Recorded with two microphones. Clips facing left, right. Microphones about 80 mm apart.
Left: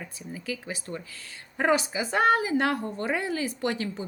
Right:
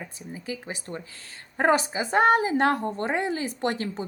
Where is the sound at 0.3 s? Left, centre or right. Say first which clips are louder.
Even; right.